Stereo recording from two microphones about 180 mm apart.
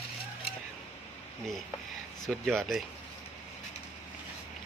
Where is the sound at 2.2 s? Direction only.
Centre (ahead or behind).